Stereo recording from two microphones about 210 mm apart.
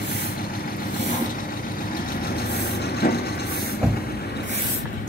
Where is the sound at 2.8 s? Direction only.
50° left (ahead or behind).